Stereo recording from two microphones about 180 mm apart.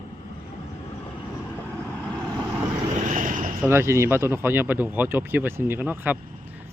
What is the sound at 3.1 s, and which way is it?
Vehicle, 45° right (ahead or behind).